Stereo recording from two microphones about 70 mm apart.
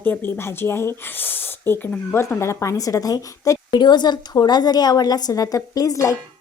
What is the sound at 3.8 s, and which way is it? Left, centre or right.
A woman's voice, left.